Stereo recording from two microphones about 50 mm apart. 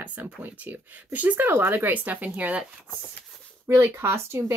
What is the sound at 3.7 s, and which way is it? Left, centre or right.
Speech, right.